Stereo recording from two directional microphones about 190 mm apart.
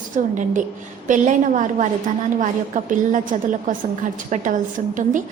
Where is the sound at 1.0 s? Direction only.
40° right (ahead or behind).